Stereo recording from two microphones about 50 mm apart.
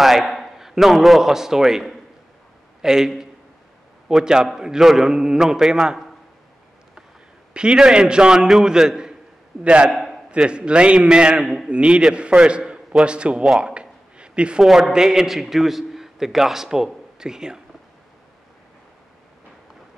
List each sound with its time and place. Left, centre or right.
0.0 s a man's voice: centre
4.2 s a man's voice: centre
7.5 s a man's voice: centre
13.6 s a sound: right
14.6 s a man's voice: centre